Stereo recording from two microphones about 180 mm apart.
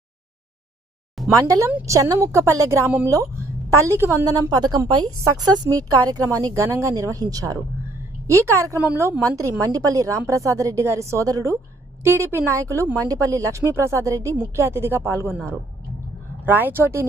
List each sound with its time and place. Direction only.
1.3 s a woman's voice: 20° right (ahead or behind)
16.5 s a woman's voice: 10° right (ahead or behind)